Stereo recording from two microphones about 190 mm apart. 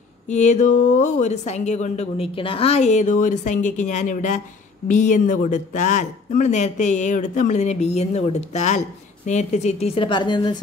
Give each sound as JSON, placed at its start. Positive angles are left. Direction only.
{"t": 0.3, "sound": "speech", "side_deg": 40}